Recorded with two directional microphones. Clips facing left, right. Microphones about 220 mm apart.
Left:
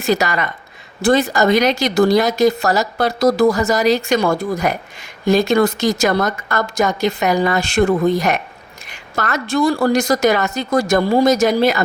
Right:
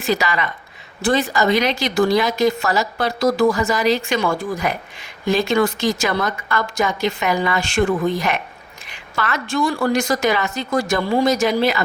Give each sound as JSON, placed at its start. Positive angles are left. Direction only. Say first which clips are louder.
{"t": 0.0, "sound": "speech", "louder": "left 3 dB", "side_deg": 45}